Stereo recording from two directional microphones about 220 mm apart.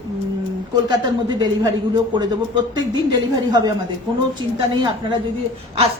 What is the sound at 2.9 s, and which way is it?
Speech, 20° right (ahead or behind).